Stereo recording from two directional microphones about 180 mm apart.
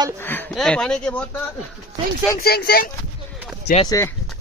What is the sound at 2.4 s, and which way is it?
Speech, 60° left (ahead or behind).